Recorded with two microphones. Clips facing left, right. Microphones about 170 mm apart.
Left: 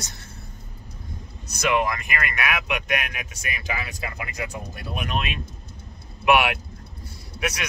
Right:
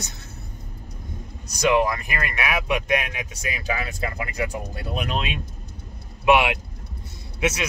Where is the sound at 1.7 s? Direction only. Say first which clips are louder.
Even; 30° right (ahead or behind).